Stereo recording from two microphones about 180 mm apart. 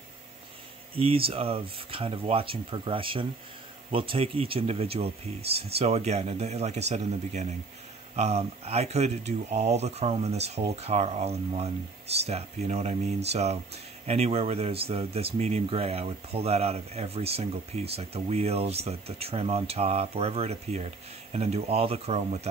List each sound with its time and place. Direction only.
0.9 s speech: 30° right (ahead or behind)